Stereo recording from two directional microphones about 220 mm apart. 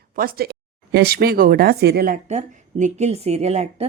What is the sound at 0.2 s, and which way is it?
Speech, 45° right (ahead or behind).